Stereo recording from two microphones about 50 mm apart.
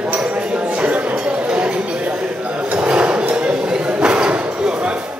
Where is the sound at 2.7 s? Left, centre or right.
Right.